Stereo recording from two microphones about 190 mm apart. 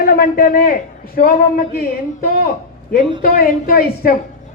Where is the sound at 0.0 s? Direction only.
50° left (ahead or behind).